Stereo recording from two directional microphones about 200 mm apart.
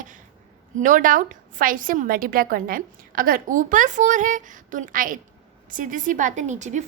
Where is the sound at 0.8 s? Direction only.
40° right (ahead or behind).